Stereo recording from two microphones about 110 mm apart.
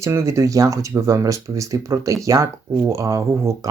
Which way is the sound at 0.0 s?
25° right (ahead or behind).